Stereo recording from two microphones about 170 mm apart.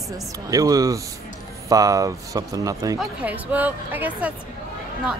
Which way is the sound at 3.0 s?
10° right (ahead or behind).